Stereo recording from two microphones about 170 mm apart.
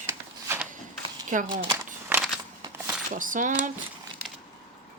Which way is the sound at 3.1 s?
50° right (ahead or behind).